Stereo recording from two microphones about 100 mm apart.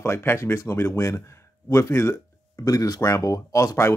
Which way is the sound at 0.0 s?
25° left (ahead or behind).